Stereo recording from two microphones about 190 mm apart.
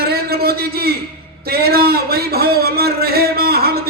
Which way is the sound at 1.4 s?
55° right (ahead or behind).